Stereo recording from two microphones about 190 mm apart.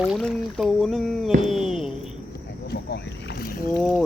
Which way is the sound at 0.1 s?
5° left (ahead or behind).